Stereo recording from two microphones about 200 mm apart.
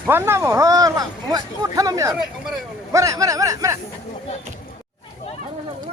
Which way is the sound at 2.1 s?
Centre (ahead or behind).